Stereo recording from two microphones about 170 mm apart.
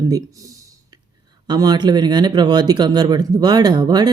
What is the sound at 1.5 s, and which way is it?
Speech, 25° right (ahead or behind).